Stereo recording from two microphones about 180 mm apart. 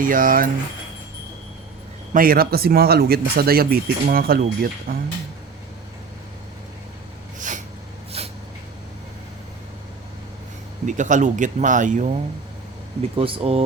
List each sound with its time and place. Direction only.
0.0 s speech: 50° right (ahead or behind)
2.1 s speech: 55° right (ahead or behind)
7.3 s snort: 45° right (ahead or behind)
8.1 s a sound: 35° right (ahead or behind)
10.8 s speech: 45° right (ahead or behind)
13.0 s speech: 30° right (ahead or behind)